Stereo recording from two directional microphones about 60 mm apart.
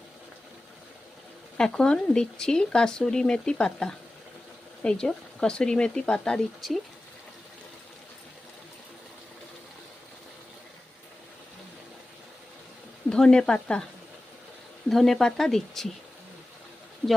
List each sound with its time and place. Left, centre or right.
1.5 s speech: centre
6.6 s speech: centre
13.1 s speech: centre
14.8 s speech: centre
17.0 s speech: right